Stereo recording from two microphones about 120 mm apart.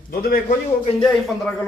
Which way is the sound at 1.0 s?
5° left (ahead or behind).